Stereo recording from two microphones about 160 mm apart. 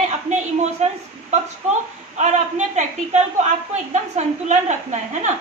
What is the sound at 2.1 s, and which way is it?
A woman's voice, 45° right (ahead or behind).